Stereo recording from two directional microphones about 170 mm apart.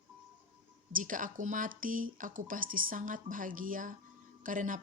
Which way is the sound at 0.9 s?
50° right (ahead or behind).